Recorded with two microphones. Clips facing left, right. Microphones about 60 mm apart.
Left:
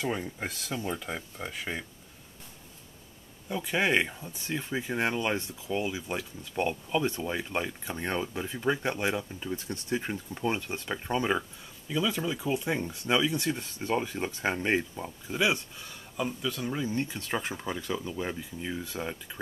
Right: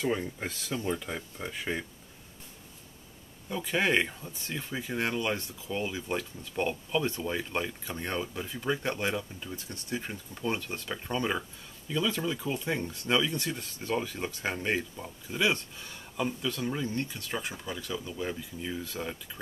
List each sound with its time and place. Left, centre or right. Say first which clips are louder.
0.0 s speech: right 1 dB; centre
3.4 s speech: left 1 dB; centre
5.7 s speech: left 1 dB; centre
16.2 s speech: even; centre
16.9 s speech: left 2 dB; centre
17.2 s speech: left 3 dB; left